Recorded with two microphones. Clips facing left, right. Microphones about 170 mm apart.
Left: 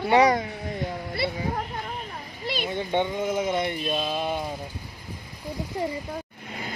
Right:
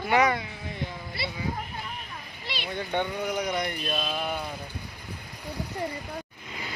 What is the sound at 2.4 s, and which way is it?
Speech, 45° left (ahead or behind).